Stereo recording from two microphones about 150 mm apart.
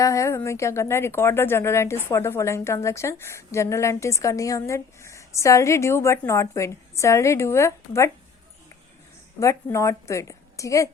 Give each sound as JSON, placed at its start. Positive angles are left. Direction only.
{"t": 0.0, "sound": "speech", "side_deg": 20}
{"t": 9.4, "sound": "speech", "side_deg": 20}